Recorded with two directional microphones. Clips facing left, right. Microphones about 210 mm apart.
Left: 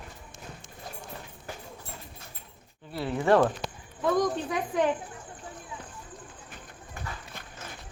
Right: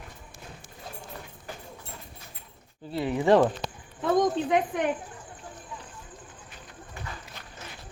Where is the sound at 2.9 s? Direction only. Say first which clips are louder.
Right 2 dB; 15° right (ahead or behind).